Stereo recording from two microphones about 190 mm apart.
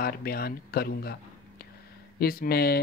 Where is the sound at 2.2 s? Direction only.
50° left (ahead or behind).